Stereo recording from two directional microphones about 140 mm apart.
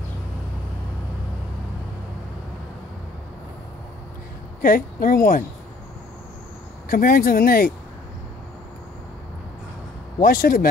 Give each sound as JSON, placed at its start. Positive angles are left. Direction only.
{"t": 4.6, "sound": "a woman's voice", "side_deg": 90}
{"t": 6.9, "sound": "speech", "side_deg": 90}
{"t": 10.2, "sound": "speech", "side_deg": 90}